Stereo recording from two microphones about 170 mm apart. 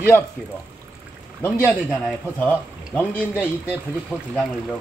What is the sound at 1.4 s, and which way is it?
A man's voice, 10° left (ahead or behind).